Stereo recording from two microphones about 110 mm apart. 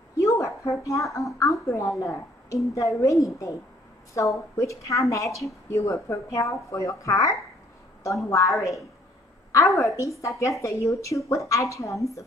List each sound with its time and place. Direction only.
0.2 s a sound: 30° left (ahead or behind)
1.7 s a woman's voice: 25° left (ahead or behind)
8.5 s a woman's voice: centre (ahead or behind)
9.8 s a woman's voice: 30° left (ahead or behind)